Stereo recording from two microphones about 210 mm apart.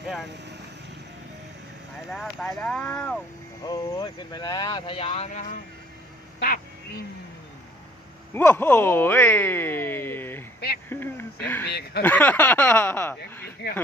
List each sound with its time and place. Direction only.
2.0 s speech: centre (ahead or behind)
3.6 s speech: 20° left (ahead or behind)
8.3 s speech: 10° left (ahead or behind)
10.8 s a sound: 10° left (ahead or behind)
11.7 s speech: 50° left (ahead or behind)
12.0 s speech: 10° left (ahead or behind)
13.6 s speech: 50° left (ahead or behind)